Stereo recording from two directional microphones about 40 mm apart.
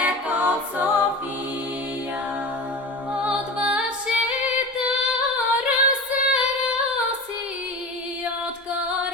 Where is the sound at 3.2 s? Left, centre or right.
Right.